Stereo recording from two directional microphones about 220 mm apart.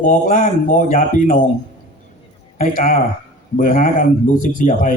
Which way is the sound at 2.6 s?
30° left (ahead or behind).